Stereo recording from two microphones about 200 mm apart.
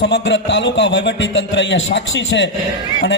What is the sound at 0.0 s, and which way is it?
A man's voice, 65° left (ahead or behind).